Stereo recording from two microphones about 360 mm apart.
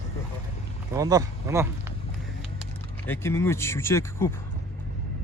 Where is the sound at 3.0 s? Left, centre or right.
Centre.